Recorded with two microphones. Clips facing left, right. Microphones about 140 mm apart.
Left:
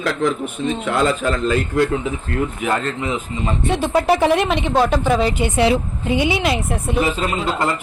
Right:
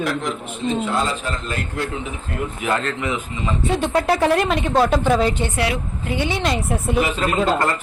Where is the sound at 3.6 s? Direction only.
Centre (ahead or behind).